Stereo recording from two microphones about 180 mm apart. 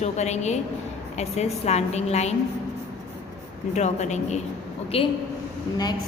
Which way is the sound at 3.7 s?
40° left (ahead or behind).